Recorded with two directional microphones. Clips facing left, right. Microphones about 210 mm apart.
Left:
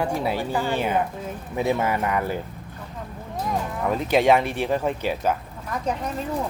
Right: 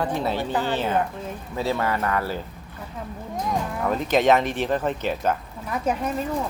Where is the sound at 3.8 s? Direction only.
10° left (ahead or behind).